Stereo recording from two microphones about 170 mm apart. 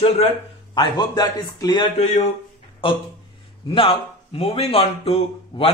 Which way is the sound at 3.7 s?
30° left (ahead or behind).